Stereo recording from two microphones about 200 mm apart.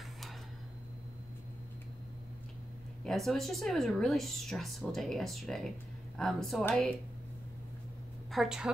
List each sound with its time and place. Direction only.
3.0 s speech: centre (ahead or behind)
8.3 s a woman's voice: centre (ahead or behind)